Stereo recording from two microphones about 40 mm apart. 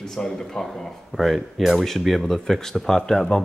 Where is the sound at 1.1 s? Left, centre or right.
Centre.